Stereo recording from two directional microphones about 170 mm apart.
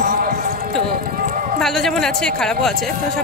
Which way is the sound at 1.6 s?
Centre (ahead or behind).